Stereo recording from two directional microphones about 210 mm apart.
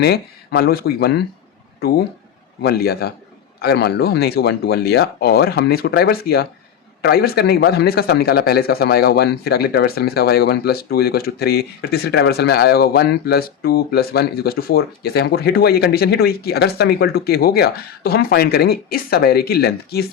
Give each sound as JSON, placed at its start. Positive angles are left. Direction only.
{"t": 0.6, "sound": "speech", "side_deg": 45}
{"t": 2.6, "sound": "speech", "side_deg": 50}